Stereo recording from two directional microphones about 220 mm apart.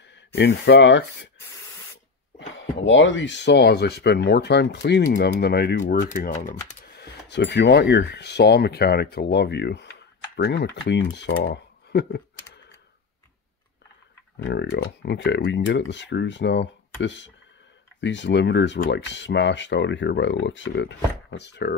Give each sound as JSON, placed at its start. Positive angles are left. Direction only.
{"t": 0.4, "sound": "speech", "side_deg": 50}
{"t": 2.8, "sound": "speech", "side_deg": 55}
{"t": 14.3, "sound": "speech", "side_deg": 50}